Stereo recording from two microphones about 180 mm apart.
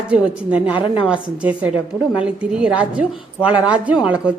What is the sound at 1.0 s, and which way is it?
A woman's voice, 5° right (ahead or behind).